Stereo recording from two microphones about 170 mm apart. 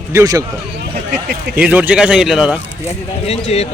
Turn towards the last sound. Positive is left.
turn(degrees=35)  # may be behind; listen again after turning